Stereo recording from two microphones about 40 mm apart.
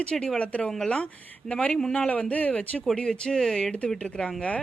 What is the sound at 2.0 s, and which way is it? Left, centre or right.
Speech, left.